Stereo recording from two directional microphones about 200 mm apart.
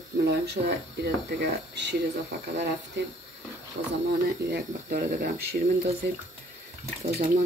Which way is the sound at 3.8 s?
60° right (ahead or behind).